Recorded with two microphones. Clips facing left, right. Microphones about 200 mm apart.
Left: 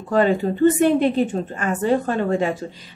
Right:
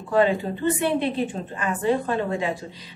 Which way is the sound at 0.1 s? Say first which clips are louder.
Left 3 dB; 45° left (ahead or behind).